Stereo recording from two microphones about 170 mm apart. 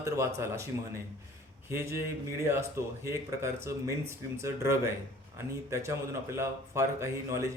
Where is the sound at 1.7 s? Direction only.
15° right (ahead or behind).